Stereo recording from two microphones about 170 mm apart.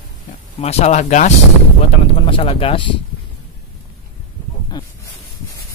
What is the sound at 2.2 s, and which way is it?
Speech, 30° left (ahead or behind).